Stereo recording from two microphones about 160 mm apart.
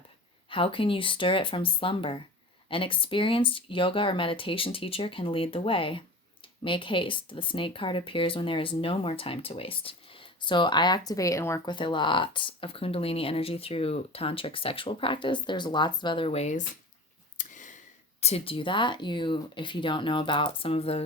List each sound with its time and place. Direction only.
0.5 s speech: 35° left (ahead or behind)
17.3 s a sound: 50° left (ahead or behind)
18.2 s speech: 40° left (ahead or behind)